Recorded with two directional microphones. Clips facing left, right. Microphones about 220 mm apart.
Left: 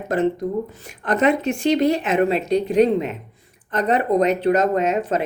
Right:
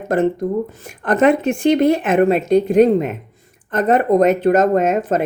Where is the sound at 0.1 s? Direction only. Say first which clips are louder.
Right 3 dB; 50° right (ahead or behind).